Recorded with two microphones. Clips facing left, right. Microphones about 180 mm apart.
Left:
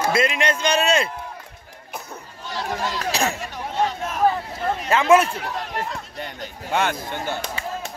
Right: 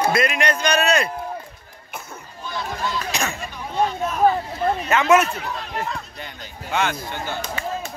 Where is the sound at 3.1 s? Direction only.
35° left (ahead or behind).